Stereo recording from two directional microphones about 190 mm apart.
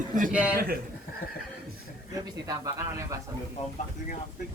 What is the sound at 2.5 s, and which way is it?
Speech, 15° right (ahead or behind).